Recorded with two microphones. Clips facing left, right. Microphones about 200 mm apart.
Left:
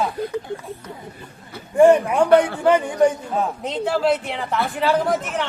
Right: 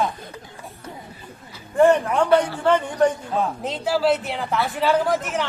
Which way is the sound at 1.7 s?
10° left (ahead or behind).